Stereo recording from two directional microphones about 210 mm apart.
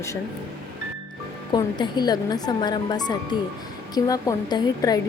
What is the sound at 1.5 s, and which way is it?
A woman's voice, 20° left (ahead or behind).